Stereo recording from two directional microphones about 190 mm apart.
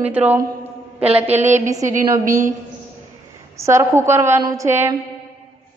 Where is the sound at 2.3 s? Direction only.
40° right (ahead or behind).